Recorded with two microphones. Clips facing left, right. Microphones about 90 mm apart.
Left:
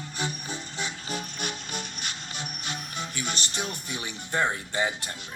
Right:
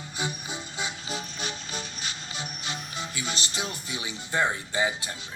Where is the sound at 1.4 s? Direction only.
60° left (ahead or behind).